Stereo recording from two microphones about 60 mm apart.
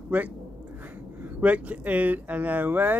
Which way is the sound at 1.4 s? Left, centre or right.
Right.